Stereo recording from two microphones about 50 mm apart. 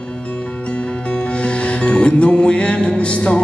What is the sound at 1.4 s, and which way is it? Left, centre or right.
Music, left.